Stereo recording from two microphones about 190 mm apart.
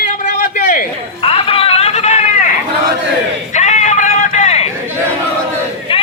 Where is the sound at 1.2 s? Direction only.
30° left (ahead or behind).